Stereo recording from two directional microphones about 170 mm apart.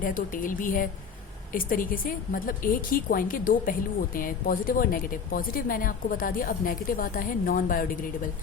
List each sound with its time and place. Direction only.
0.0 s a woman's voice: 55° left (ahead or behind)